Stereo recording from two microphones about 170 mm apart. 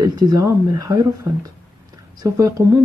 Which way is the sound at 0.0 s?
20° right (ahead or behind).